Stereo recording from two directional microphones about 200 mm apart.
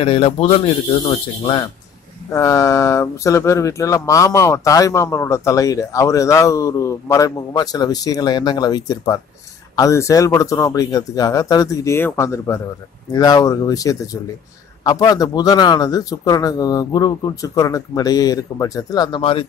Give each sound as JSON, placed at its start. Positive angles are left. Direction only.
{"t": 0.0, "sound": "a man's voice", "side_deg": 30}